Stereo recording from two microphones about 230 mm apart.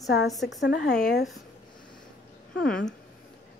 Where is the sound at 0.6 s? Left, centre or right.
Left.